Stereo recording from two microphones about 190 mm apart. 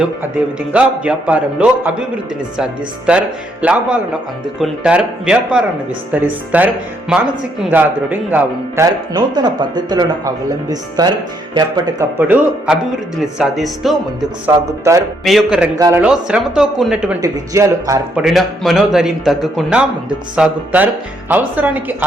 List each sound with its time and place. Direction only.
0.7 s speech: 5° right (ahead or behind)
3.1 s a man's voice: 5° right (ahead or behind); by 11.7 s 25° right (ahead or behind)
12.3 s a man's voice: 10° right (ahead or behind)
14.4 s speech: 15° right (ahead or behind)
15.2 s a man's voice: centre (ahead or behind)
15.8 s speech: 15° right (ahead or behind)
16.0 s a man's voice: 5° right (ahead or behind)
17.2 s speech: 20° right (ahead or behind)
18.2 s a man's voice: centre (ahead or behind)